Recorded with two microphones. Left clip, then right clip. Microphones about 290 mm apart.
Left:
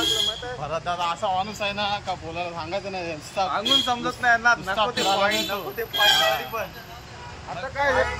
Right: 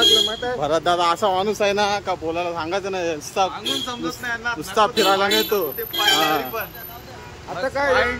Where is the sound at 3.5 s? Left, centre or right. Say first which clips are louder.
Left 4 dB; centre.